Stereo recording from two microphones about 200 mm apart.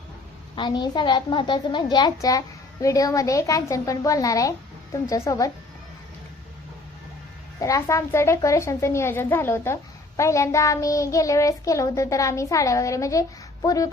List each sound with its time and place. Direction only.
0.5 s a child's voice: 20° left (ahead or behind)
2.8 s child singing: 15° left (ahead or behind)
7.6 s child singing: 15° left (ahead or behind)